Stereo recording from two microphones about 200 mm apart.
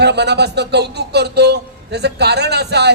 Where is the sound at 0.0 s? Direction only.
55° right (ahead or behind).